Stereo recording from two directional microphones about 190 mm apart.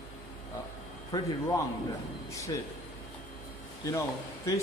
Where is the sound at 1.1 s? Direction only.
15° left (ahead or behind).